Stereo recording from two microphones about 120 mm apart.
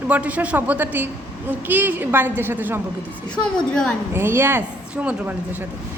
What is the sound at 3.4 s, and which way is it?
Speech, 5° left (ahead or behind).